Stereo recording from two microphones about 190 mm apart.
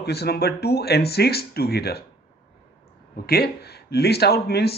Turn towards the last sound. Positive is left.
turn(degrees=55)  # may be behind; listen again after turning